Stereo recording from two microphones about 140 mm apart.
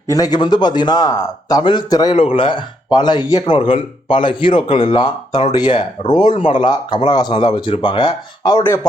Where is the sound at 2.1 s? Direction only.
45° left (ahead or behind).